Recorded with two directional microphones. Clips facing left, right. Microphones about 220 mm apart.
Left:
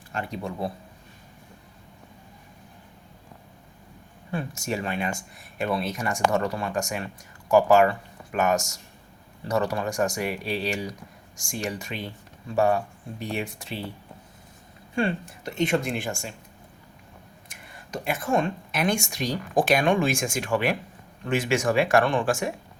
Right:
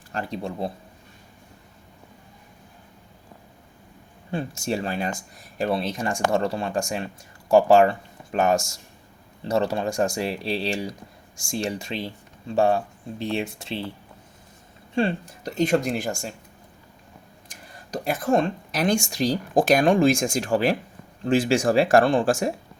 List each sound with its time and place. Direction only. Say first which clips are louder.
0.1 s speech: right 2 dB; 35° right (ahead or behind)
4.3 s speech: right 3 dB; 30° right (ahead or behind)
14.9 s speech: right 2 dB; 35° right (ahead or behind)
17.7 s speech: right 3 dB; 35° right (ahead or behind)